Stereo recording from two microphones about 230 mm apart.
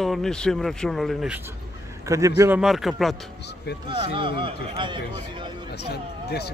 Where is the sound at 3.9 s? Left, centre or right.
Right.